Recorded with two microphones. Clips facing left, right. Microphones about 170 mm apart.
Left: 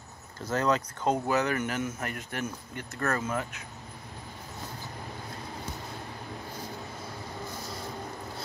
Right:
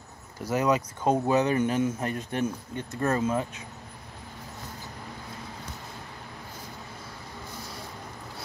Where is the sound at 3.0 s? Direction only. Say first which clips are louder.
Right 4 dB; 15° right (ahead or behind).